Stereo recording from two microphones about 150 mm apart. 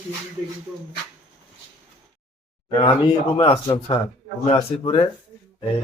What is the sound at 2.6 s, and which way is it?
Speech, 30° left (ahead or behind).